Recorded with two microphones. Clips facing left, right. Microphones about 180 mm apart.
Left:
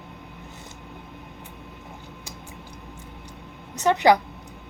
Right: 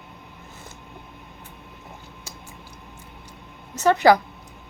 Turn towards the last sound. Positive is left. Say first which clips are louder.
# right 2 dB
turn(degrees=20)  # may be behind; listen again after turning